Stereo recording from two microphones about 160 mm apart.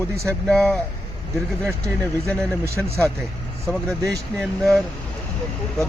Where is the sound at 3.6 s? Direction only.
5° left (ahead or behind).